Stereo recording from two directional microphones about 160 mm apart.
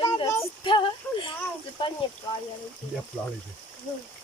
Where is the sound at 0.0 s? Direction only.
20° left (ahead or behind).